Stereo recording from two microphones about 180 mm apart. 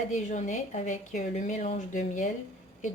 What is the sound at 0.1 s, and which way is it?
Speech, 40° left (ahead or behind).